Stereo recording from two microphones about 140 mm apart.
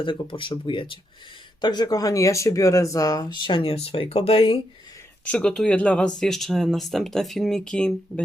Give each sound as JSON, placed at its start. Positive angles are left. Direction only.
{"t": 0.0, "sound": "speech", "side_deg": 40}
{"t": 5.2, "sound": "speech", "side_deg": 10}